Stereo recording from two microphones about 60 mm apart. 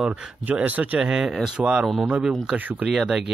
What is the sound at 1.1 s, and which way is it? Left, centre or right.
Speech, centre.